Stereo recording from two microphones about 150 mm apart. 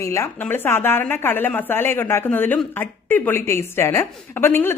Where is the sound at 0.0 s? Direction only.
20° left (ahead or behind).